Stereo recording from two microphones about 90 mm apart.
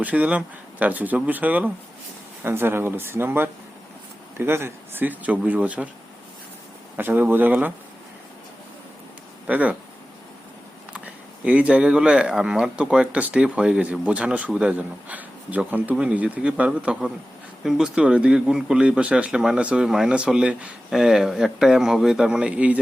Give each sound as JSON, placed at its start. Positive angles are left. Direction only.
{"t": 0.0, "sound": "speech", "side_deg": -15}
{"t": 6.9, "sound": "speech", "side_deg": -20}
{"t": 9.5, "sound": "speech", "side_deg": -15}
{"t": 10.9, "sound": "speech", "side_deg": -15}